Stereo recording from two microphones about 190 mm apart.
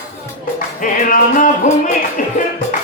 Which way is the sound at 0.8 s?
45° left (ahead or behind).